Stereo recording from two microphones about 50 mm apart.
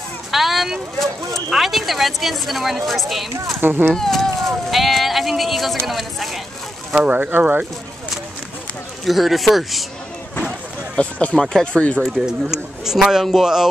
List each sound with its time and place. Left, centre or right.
0.3 s a woman's voice: centre
3.6 s speech: right
3.9 s a woman's voice: centre
7.1 s speech: right
9.0 s a woman's voice: centre
11.0 s speech: left
11.3 s speech: centre
11.6 s speech: left
12.0 s a man's voice: centre